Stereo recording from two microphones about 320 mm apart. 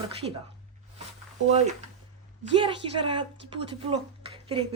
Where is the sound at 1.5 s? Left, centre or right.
Right.